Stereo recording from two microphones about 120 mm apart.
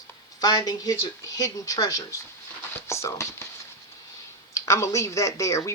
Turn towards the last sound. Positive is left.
turn(degrees=25)  # may be behind; listen again after turning